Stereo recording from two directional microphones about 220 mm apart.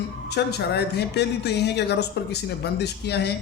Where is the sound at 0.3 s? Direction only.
50° left (ahead or behind).